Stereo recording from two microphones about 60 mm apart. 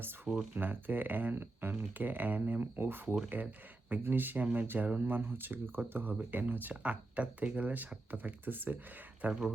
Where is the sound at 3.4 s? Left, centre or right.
Right.